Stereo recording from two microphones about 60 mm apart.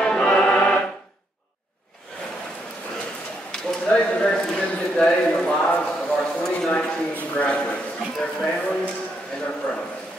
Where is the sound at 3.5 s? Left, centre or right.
Centre.